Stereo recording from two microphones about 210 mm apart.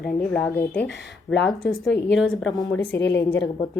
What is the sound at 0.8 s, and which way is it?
A woman's voice, 60° left (ahead or behind).